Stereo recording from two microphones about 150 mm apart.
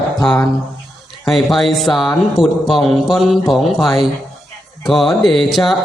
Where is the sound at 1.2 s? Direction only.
Centre (ahead or behind).